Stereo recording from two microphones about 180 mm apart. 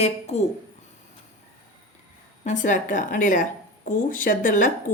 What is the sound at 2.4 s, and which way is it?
Speech, 45° left (ahead or behind).